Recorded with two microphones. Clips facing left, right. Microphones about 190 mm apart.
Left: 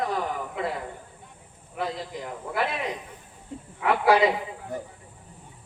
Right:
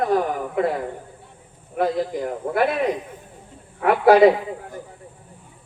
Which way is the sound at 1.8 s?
50° right (ahead or behind).